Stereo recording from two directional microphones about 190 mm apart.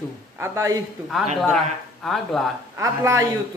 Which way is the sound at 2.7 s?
15° right (ahead or behind).